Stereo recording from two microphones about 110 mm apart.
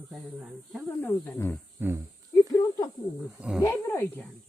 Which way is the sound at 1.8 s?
15° right (ahead or behind).